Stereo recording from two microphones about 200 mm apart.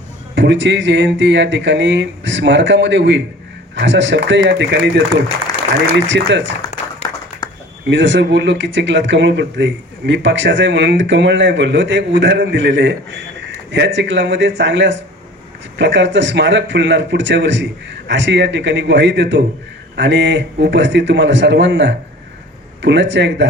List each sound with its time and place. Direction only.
0.3 s speech: 65° right (ahead or behind)
6.1 s speech: 65° right (ahead or behind)
7.0 s applause: 20° left (ahead or behind)
7.9 s speech: 65° right (ahead or behind)